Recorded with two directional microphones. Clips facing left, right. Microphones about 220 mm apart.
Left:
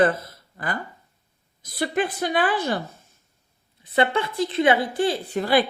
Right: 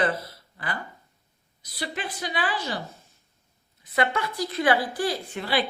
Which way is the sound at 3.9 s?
30° left (ahead or behind).